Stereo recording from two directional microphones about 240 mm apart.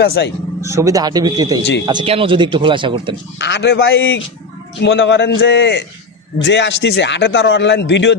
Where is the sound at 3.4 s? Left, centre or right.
Left.